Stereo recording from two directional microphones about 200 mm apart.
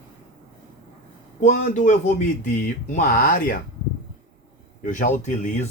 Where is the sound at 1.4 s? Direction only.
40° left (ahead or behind).